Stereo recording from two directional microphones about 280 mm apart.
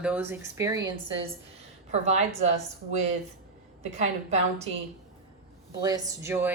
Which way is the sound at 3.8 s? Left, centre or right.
Right.